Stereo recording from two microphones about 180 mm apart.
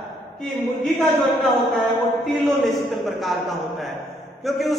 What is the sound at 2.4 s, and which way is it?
A man's voice, centre (ahead or behind).